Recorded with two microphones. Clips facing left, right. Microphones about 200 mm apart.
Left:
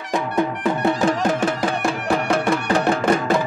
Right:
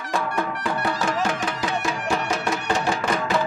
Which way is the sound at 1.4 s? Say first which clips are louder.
Left 5 dB; 55° left (ahead or behind).